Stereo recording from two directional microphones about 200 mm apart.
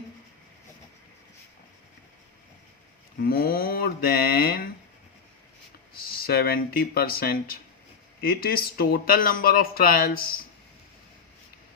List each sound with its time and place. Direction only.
3.2 s speech: 50° left (ahead or behind)
5.9 s speech: 50° left (ahead or behind)